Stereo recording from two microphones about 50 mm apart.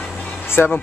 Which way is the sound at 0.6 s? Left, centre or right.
Left.